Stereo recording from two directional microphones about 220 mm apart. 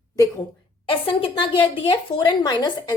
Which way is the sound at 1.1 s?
25° left (ahead or behind).